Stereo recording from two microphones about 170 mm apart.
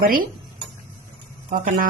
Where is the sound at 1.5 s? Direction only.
55° right (ahead or behind).